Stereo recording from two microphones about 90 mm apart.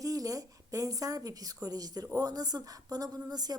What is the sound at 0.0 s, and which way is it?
A woman's voice, 40° right (ahead or behind).